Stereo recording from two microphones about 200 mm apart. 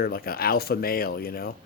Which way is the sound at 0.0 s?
50° left (ahead or behind).